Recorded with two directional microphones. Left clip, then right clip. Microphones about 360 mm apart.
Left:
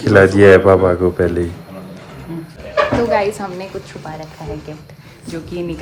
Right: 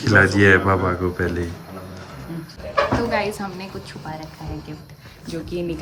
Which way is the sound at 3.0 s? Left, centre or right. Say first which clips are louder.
Left 7 dB; centre.